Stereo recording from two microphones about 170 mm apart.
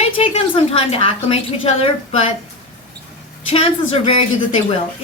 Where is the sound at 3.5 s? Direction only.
35° left (ahead or behind).